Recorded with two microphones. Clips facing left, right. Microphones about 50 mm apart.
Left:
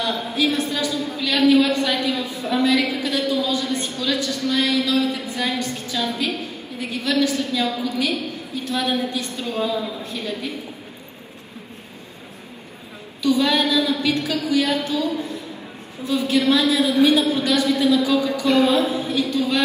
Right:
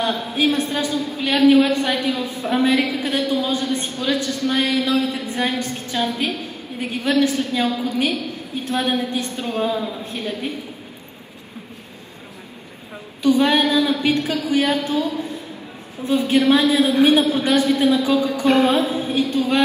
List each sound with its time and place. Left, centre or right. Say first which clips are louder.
0.0 s a woman's voice: right 2 dB; right
13.2 s a woman's voice: right 3 dB; right